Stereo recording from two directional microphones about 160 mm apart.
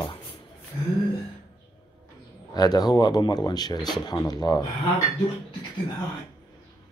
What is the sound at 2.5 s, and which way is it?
Speech, 25° left (ahead or behind).